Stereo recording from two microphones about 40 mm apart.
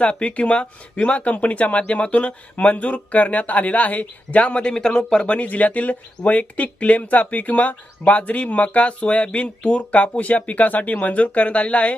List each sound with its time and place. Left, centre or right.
0.0 s speech: left
5.2 s speech: left